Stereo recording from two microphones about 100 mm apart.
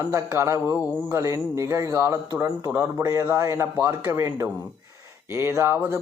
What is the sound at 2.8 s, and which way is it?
A man's voice, 30° right (ahead or behind).